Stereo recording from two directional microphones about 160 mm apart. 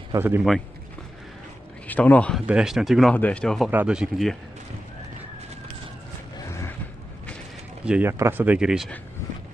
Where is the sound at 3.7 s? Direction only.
10° right (ahead or behind).